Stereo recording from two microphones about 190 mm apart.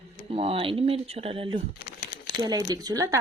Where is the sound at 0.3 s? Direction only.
30° right (ahead or behind).